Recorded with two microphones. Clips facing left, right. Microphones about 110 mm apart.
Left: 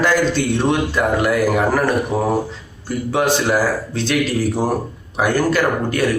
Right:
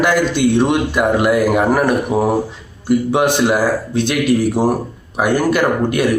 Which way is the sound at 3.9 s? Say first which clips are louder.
Right 3 dB; 55° right (ahead or behind).